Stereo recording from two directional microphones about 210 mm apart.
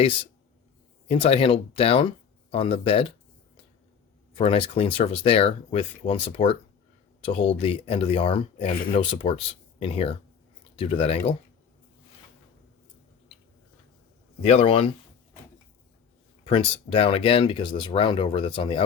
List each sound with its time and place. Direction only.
1.0 s speech: 30° left (ahead or behind)
4.4 s speech: 25° left (ahead or behind)
14.4 s speech: 30° left (ahead or behind)
16.4 s speech: 25° left (ahead or behind)